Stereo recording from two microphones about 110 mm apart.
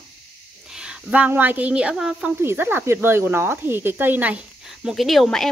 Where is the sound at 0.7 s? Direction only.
10° right (ahead or behind).